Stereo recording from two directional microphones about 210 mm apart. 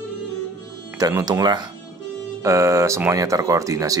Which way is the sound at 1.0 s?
15° right (ahead or behind).